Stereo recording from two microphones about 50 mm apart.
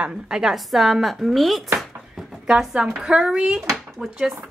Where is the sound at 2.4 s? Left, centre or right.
Centre.